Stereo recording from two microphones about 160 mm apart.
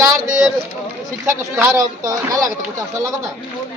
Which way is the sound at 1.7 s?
20° right (ahead or behind).